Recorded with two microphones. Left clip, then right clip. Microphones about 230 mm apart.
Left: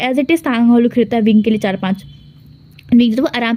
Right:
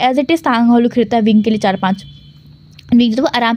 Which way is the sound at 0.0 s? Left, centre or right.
Centre.